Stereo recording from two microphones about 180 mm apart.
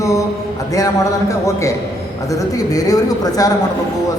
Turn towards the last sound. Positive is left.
turn(degrees=20)  # may be behind; listen again after turning